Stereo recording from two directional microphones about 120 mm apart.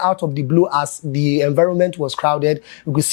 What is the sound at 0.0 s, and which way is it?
Speech, 15° left (ahead or behind).